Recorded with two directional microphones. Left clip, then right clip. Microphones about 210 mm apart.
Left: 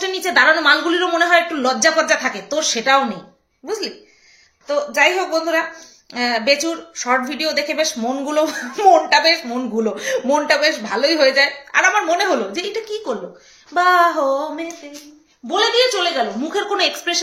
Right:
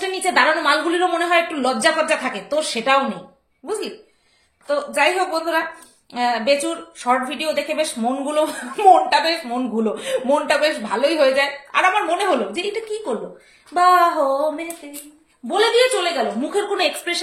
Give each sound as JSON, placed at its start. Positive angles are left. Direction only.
{"t": 0.0, "sound": "a woman's voice", "side_deg": 20}
{"t": 4.6, "sound": "a woman's voice", "side_deg": 20}
{"t": 15.4, "sound": "a woman's voice", "side_deg": 5}